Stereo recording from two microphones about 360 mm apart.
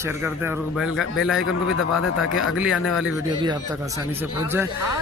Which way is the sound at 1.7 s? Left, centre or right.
Left.